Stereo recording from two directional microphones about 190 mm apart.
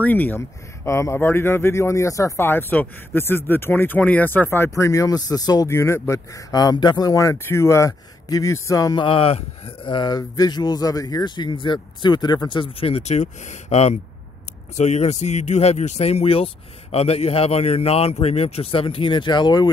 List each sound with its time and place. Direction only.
0.0 s a man's voice: 10° left (ahead or behind)